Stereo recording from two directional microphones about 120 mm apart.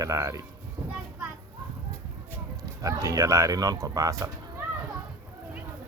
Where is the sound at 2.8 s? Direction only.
30° right (ahead or behind).